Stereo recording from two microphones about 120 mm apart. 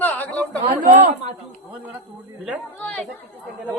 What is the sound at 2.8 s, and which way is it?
Speech, 10° left (ahead or behind).